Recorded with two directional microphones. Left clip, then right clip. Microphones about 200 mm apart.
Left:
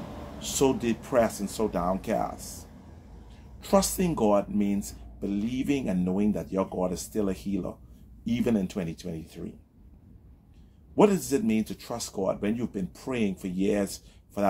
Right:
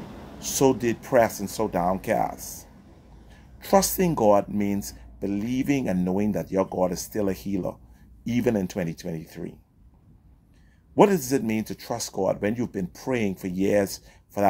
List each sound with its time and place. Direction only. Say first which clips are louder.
0.4 s speech: right 4 dB; 45° right (ahead or behind)
11.0 s speech: right 3 dB; 45° right (ahead or behind)